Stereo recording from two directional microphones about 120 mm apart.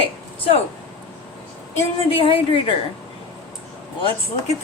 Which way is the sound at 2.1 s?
50° left (ahead or behind).